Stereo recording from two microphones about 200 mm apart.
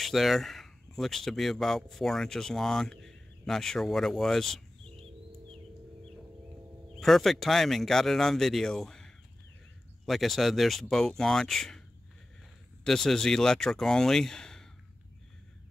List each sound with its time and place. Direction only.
0.0 s speech: centre (ahead or behind)
4.8 s bird: 30° right (ahead or behind)
7.0 s speech: centre (ahead or behind)
12.8 s speech: centre (ahead or behind)